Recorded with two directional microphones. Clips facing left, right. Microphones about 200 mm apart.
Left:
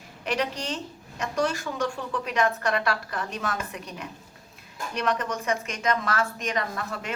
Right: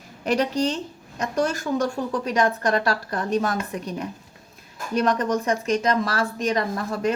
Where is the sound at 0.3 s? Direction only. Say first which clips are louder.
Right 7 dB; 40° right (ahead or behind).